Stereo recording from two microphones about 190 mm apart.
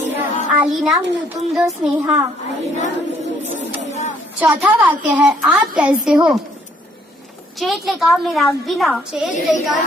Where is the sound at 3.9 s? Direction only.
35° left (ahead or behind).